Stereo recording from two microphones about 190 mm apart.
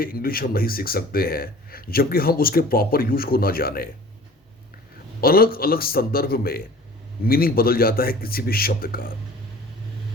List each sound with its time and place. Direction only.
0.0 s speech: 50° left (ahead or behind)
5.2 s speech: 50° left (ahead or behind)